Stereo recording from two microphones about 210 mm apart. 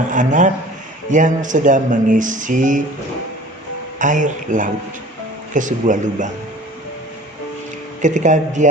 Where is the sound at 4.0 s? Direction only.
35° right (ahead or behind).